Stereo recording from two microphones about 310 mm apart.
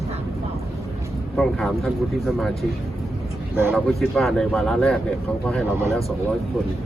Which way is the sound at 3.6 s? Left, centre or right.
Centre.